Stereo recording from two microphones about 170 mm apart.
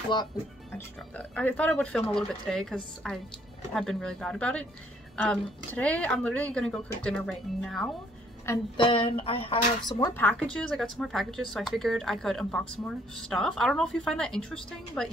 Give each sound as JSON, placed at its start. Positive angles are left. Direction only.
{"t": 0.7, "sound": "speech", "side_deg": 10}
{"t": 8.7, "sound": "speech", "side_deg": 30}
{"t": 10.1, "sound": "speech", "side_deg": 10}